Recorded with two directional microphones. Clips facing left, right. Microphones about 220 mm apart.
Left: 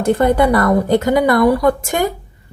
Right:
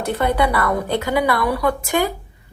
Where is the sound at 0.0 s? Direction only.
45° left (ahead or behind).